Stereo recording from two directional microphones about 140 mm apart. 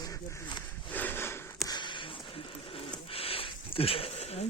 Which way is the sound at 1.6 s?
30° left (ahead or behind).